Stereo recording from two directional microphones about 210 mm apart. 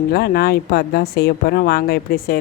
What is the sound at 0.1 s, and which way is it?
A woman's voice, 50° left (ahead or behind).